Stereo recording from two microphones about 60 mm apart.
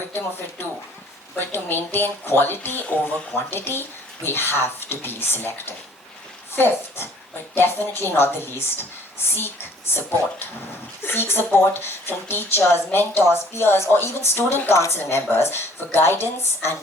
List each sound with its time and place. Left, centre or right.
0.1 s a woman's voice: left